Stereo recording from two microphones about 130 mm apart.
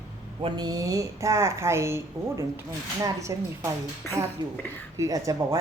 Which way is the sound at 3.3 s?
25° right (ahead or behind).